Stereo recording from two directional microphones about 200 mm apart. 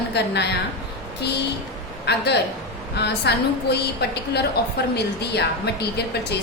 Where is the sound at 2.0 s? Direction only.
55° left (ahead or behind).